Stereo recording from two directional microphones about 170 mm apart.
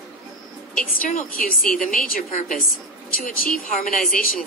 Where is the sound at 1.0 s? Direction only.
50° left (ahead or behind).